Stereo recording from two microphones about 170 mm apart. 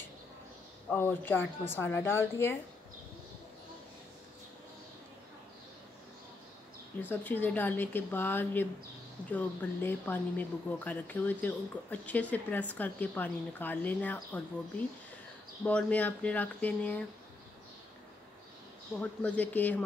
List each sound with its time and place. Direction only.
0.8 s speech: 10° left (ahead or behind)
7.0 s speech: 10° left (ahead or behind)
15.6 s speech: 10° left (ahead or behind)
18.9 s speech: 10° left (ahead or behind)